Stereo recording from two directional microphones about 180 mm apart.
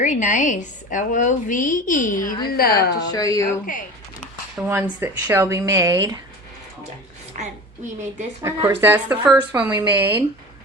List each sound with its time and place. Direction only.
0.0 s a woman's voice: 45° left (ahead or behind); by 3.1 s 60° left (ahead or behind)
3.1 s speech: 20° left (ahead or behind)
4.5 s speech: 10° right (ahead or behind)
7.3 s a woman's voice: 45° right (ahead or behind)
8.4 s speech: 15° right (ahead or behind)